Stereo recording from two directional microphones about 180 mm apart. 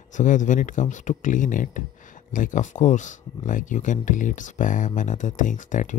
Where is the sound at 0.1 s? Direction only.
45° left (ahead or behind).